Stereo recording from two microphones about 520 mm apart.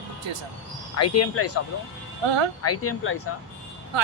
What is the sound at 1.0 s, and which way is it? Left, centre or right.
Speech, left.